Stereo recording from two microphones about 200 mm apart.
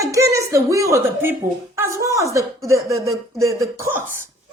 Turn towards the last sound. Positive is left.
turn(degrees=-10)  # may be behind; listen again after turning